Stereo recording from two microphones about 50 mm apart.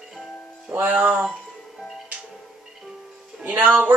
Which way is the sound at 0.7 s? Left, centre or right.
Right.